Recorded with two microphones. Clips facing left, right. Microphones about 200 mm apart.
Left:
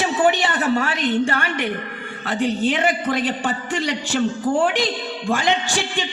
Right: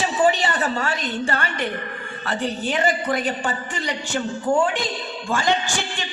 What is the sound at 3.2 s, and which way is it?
A man's voice, 90° left.